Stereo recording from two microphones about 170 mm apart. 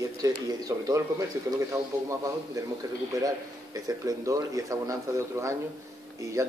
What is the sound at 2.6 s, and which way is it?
A man's voice, 20° right (ahead or behind).